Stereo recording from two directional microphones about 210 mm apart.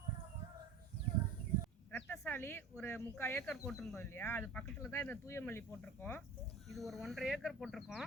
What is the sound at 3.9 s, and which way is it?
Speech, 10° left (ahead or behind).